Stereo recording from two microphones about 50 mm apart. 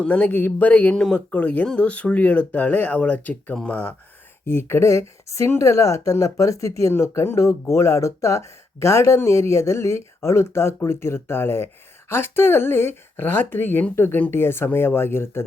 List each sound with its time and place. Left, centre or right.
0.0 s speech: left
0.3 s speech: left
4.4 s speech: left
4.8 s speech: left
6.9 s speech: left